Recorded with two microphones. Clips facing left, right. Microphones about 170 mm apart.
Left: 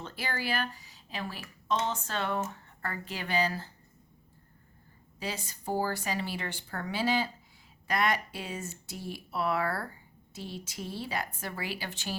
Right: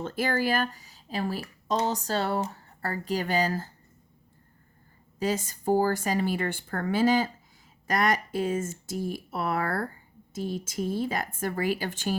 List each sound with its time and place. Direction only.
0.0 s speech: 45° right (ahead or behind)
5.2 s speech: 45° right (ahead or behind)